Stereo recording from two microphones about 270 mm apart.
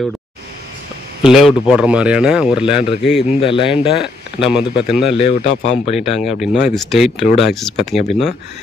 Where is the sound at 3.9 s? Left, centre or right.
Centre.